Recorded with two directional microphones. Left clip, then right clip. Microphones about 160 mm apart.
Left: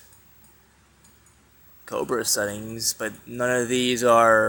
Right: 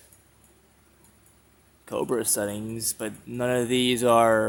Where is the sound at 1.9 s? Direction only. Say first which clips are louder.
Left 2 dB; 30° right (ahead or behind).